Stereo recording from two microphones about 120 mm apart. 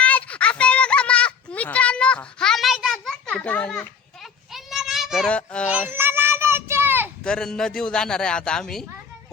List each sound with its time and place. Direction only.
0.0 s a sound: 10° left (ahead or behind)
5.3 s speech: 10° left (ahead or behind)
5.9 s children playing: 15° right (ahead or behind)
7.3 s a man's voice: 5° left (ahead or behind)